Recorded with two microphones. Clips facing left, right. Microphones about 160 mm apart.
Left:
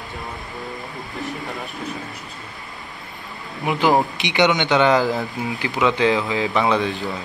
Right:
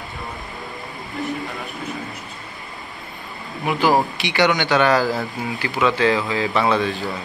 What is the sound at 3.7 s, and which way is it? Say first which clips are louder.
Speech: even; 20° left (ahead or behind).